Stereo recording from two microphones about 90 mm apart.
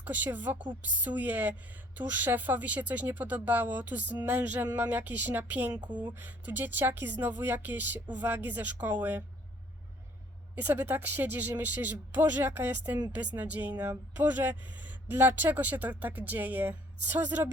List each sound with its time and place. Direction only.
0.0 s speech: 20° right (ahead or behind)
5.8 s speech: 55° right (ahead or behind)
6.1 s speech: 20° right (ahead or behind)
10.5 s speech: 20° right (ahead or behind)